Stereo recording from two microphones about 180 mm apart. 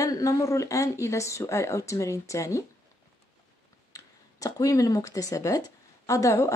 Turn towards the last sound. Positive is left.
turn(degrees=15)  # may be behind; listen again after turning